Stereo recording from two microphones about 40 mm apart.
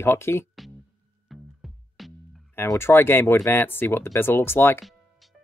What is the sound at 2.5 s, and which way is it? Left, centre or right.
Speech, left.